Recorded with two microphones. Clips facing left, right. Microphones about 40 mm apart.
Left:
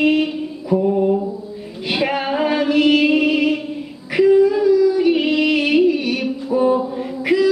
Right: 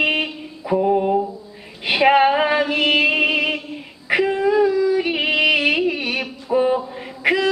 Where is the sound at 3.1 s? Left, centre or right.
Right.